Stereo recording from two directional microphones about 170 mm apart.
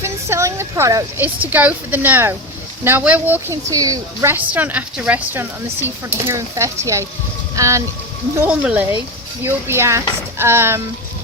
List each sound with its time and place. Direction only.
0.0 s a woman's voice: 15° right (ahead or behind)